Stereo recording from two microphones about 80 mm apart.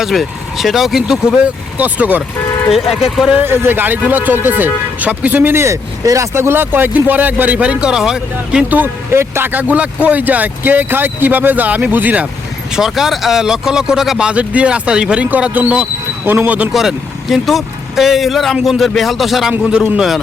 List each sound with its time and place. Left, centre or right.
0.0 s speech: centre
1.8 s speech: right
2.7 s speech: centre
3.4 s speech: right; by 8.6 s centre
8.7 s speech: right
12.7 s speech: centre; by 16.6 s right
16.7 s speech: centre
19.6 s speech: centre